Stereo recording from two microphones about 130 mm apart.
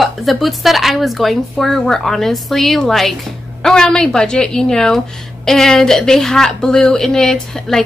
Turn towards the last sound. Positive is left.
turn(degrees=5)  # may be behind; listen again after turning